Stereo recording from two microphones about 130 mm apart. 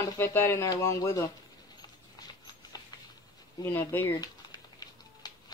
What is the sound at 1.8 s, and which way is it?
Rodents, 30° left (ahead or behind).